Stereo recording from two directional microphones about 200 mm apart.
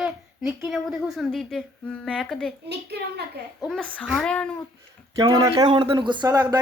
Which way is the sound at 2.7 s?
55° right (ahead or behind).